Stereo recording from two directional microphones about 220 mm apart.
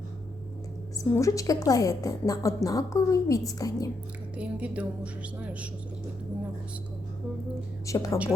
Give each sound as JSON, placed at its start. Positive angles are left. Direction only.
{"t": 1.1, "sound": "a woman's voice", "side_deg": 15}
{"t": 4.4, "sound": "music", "side_deg": -5}
{"t": 7.9, "sound": "a woman's voice", "side_deg": 15}